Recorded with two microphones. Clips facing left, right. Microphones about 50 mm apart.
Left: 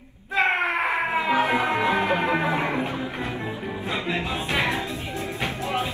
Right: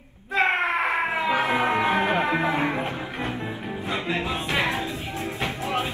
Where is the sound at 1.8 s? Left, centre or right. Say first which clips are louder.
Even; right.